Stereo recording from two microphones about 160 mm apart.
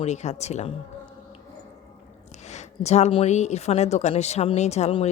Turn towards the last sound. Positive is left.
turn(degrees=40)  # may be behind; listen again after turning